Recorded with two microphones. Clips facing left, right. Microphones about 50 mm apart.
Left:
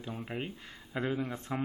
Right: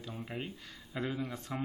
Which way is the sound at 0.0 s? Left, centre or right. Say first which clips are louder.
Left 3 dB; left.